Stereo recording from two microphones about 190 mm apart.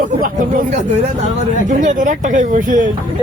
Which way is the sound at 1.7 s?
45° right (ahead or behind).